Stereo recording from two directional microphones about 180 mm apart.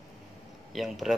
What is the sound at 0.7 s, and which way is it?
Speech, centre (ahead or behind).